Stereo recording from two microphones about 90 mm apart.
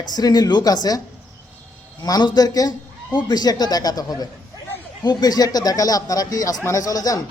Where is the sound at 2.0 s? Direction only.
45° left (ahead or behind).